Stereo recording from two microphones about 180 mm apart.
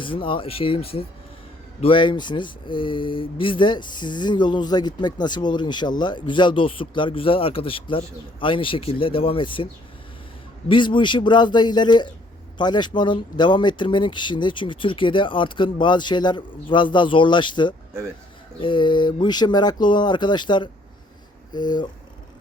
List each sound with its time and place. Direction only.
0.0 s speech: 30° left (ahead or behind)
10.7 s speech: 25° left (ahead or behind)